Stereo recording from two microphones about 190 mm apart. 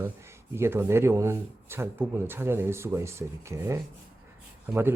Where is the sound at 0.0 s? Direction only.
15° right (ahead or behind).